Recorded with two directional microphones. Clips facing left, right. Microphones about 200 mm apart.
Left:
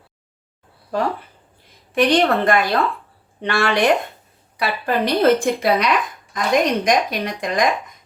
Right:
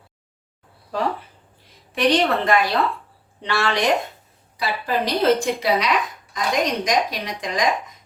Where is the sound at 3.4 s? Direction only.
55° left (ahead or behind).